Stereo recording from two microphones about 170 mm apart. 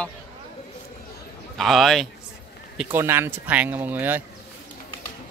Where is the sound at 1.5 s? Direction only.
Centre (ahead or behind).